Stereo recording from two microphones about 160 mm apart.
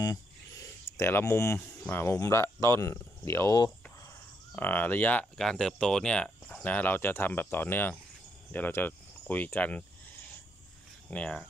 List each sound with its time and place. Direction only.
0.0 s speech: 20° left (ahead or behind)
4.6 s speech: 10° left (ahead or behind)
11.1 s speech: 5° left (ahead or behind)